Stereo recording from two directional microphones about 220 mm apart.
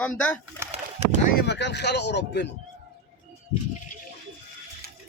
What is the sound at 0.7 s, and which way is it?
Pigeon, 30° right (ahead or behind).